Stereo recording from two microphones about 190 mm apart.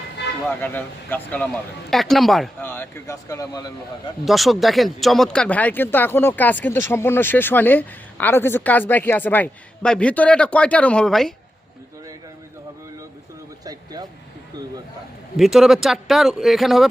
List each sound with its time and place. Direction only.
0.6 s speech: 10° left (ahead or behind)
2.6 s speech: 10° left (ahead or behind)
4.3 s speech: centre (ahead or behind)
13.7 s speech: 20° right (ahead or behind)
15.4 s speech: centre (ahead or behind)